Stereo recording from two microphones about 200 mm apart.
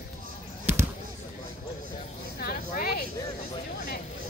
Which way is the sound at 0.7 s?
10° right (ahead or behind).